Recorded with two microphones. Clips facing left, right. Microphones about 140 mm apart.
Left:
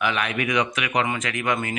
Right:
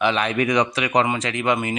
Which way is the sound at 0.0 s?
30° right (ahead or behind).